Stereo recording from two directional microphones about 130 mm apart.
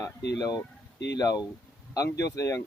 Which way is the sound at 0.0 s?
30° left (ahead or behind).